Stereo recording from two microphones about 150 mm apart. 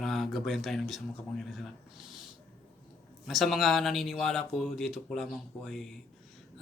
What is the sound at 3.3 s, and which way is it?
Speech, centre (ahead or behind).